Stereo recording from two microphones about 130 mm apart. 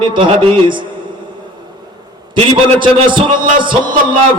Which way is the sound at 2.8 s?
40° right (ahead or behind).